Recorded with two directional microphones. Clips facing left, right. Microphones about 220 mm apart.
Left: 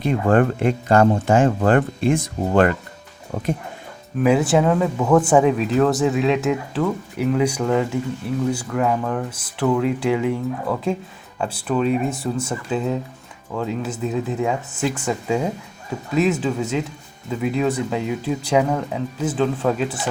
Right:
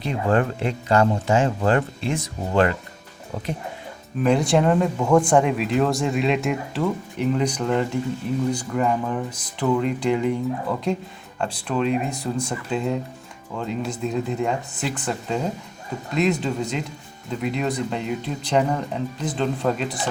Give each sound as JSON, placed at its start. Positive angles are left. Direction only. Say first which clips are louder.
{"t": 0.0, "sound": "speech", "louder": "left 4 dB", "side_deg": 50}
{"t": 4.2, "sound": "speech", "louder": "left 2 dB", "side_deg": 5}